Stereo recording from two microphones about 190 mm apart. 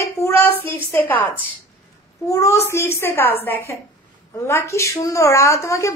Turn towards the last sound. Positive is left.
turn(degrees=15)  # may be behind; listen again after turning